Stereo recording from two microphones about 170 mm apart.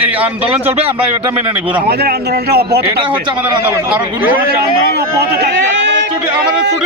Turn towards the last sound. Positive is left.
turn(degrees=-90)